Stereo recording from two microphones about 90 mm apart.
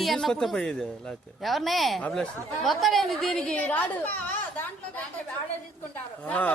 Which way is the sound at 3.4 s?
15° left (ahead or behind).